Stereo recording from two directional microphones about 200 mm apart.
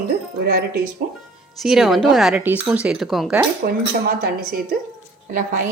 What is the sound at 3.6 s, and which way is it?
A woman's voice, 55° right (ahead or behind).